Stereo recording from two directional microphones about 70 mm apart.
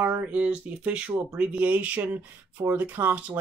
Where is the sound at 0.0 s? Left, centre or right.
Right.